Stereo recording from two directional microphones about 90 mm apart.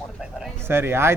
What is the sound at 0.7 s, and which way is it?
Speech, 25° right (ahead or behind).